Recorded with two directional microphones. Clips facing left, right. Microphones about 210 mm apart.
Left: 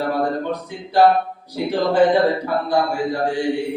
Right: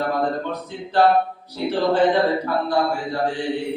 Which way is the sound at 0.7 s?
10° left (ahead or behind).